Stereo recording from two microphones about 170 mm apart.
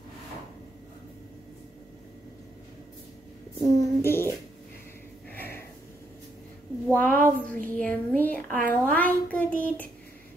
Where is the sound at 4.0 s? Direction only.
15° left (ahead or behind).